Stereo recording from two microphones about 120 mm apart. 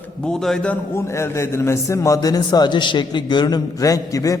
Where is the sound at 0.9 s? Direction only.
20° left (ahead or behind).